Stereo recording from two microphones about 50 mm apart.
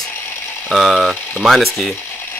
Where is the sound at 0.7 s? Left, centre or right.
Centre.